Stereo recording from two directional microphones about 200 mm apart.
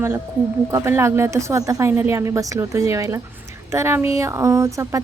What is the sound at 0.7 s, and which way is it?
A woman's voice, 15° right (ahead or behind).